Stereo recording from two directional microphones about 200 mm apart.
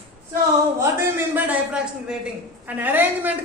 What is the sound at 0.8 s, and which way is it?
A man's voice, 10° right (ahead or behind).